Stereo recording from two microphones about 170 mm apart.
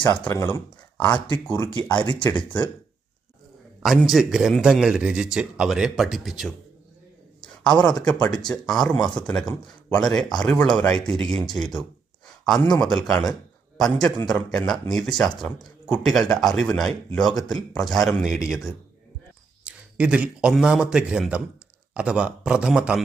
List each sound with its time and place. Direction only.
0.0 s speech: 15° left (ahead or behind)
2.0 s speech: 25° left (ahead or behind)
4.1 s a man's voice: 5° right (ahead or behind)
7.4 s a sound: 5° left (ahead or behind)
8.0 s a man's voice: 5° left (ahead or behind)